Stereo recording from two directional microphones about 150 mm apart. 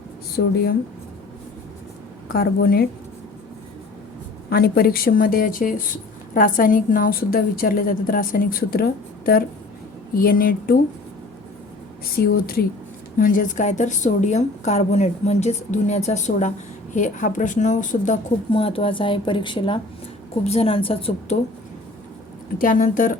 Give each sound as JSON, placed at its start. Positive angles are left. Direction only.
{"t": 0.3, "sound": "a woman's voice", "side_deg": 85}
{"t": 2.3, "sound": "a woman's voice", "side_deg": 80}
{"t": 4.4, "sound": "speech", "side_deg": 90}
{"t": 12.0, "sound": "a woman's voice", "side_deg": 90}
{"t": 13.1, "sound": "a woman's voice", "side_deg": 65}
{"t": 18.5, "sound": "speech", "side_deg": 35}
{"t": 22.5, "sound": "speech", "side_deg": 60}